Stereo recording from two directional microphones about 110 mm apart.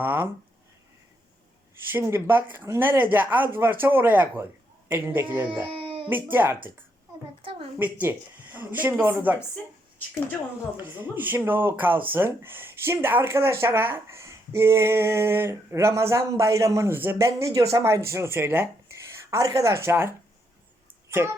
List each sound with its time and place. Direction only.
0.0 s speech: 20° right (ahead or behind)
1.7 s speech: 20° right (ahead or behind)
5.7 s a sound: 50° right (ahead or behind)
6.3 s speech: 20° right (ahead or behind)
7.8 s speech: 15° right (ahead or behind)
10.8 s speech: 20° right (ahead or behind)
21.2 s speech: 20° right (ahead or behind)